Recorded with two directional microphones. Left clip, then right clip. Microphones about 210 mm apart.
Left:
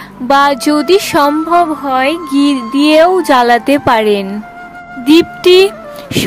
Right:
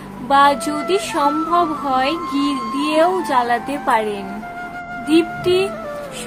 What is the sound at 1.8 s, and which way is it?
Music, 35° left (ahead or behind).